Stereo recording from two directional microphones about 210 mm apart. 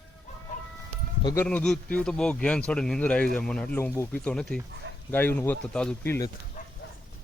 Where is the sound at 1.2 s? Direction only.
15° left (ahead or behind).